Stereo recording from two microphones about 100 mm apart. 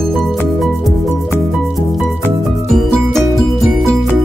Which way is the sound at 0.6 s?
Centre (ahead or behind).